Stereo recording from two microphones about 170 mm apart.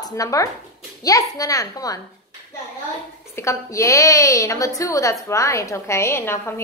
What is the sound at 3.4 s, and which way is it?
A woman's voice, 15° left (ahead or behind).